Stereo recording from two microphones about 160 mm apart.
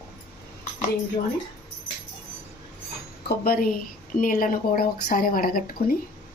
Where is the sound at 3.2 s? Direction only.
70° left (ahead or behind).